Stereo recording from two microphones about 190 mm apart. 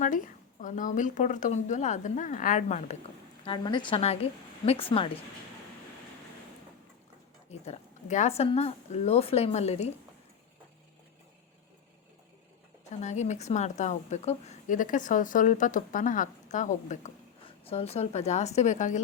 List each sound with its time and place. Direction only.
0.6 s a woman's voice: 45° left (ahead or behind)
3.4 s a woman's voice: 25° left (ahead or behind)
7.6 s a woman's voice: 35° left (ahead or behind)
12.9 s a woman's voice: 40° left (ahead or behind)